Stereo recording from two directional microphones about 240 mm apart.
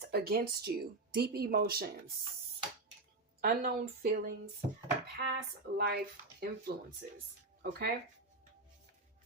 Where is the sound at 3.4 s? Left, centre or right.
Right.